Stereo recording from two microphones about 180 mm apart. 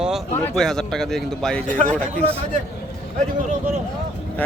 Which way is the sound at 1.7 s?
45° right (ahead or behind).